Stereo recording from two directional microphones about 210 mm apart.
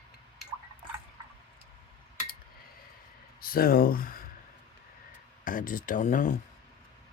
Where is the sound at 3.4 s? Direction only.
45° left (ahead or behind).